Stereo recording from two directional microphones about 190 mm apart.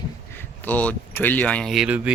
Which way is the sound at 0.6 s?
10° left (ahead or behind).